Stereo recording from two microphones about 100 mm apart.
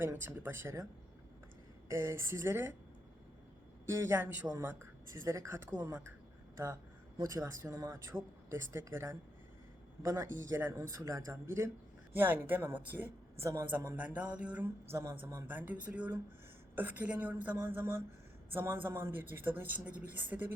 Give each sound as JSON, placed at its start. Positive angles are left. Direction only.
{"t": 0.0, "sound": "speech", "side_deg": -25}
{"t": 1.9, "sound": "speech", "side_deg": -30}
{"t": 3.8, "sound": "speech", "side_deg": -25}
{"t": 7.2, "sound": "a woman's voice", "side_deg": -30}